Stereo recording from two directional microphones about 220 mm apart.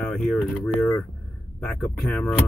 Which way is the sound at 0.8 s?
10° left (ahead or behind).